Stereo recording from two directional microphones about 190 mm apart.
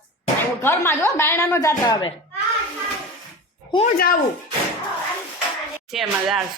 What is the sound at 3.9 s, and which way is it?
Speech, 50° left (ahead or behind).